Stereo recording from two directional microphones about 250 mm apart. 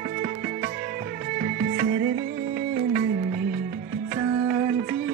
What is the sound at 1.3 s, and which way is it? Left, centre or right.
Music, right.